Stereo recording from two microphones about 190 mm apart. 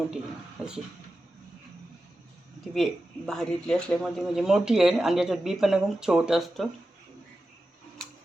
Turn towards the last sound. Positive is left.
turn(degrees=0)  # may be behind; listen again after turning